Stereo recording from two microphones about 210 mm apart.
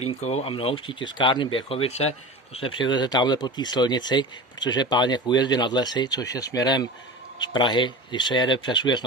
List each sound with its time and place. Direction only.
0.1 s a man's voice: 30° left (ahead or behind)